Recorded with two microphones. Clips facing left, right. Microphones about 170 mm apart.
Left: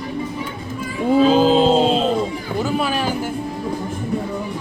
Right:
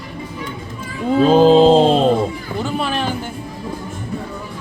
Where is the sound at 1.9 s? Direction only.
45° right (ahead or behind).